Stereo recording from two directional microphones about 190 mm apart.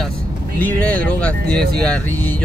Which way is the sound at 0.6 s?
10° left (ahead or behind).